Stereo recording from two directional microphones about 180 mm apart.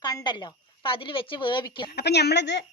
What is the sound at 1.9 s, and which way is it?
Speech, 65° left (ahead or behind).